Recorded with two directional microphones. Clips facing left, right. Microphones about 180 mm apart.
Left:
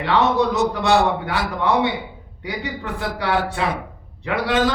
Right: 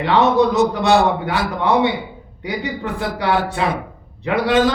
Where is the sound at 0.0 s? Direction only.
20° right (ahead or behind).